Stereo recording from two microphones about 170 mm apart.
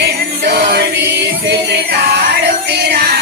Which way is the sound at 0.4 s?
75° right (ahead or behind).